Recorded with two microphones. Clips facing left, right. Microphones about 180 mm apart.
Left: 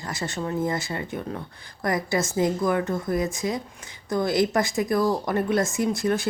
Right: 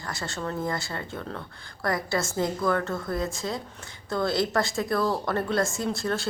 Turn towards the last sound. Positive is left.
turn(degrees=20)  # may be behind; listen again after turning